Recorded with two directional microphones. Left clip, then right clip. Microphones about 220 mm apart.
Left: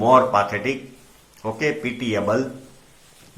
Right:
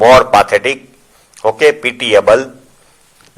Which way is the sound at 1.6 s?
50° right (ahead or behind).